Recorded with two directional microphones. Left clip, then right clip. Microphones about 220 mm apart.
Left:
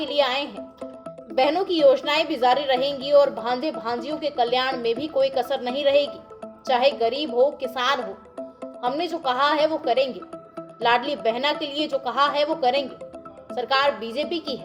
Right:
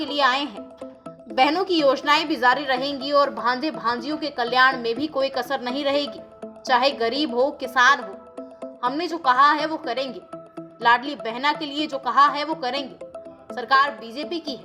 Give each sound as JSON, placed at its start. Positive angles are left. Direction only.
{"t": 0.0, "sound": "a woman's voice", "side_deg": -20}